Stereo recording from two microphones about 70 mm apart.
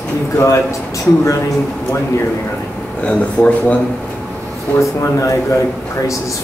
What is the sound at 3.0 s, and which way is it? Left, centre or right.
Speech, centre.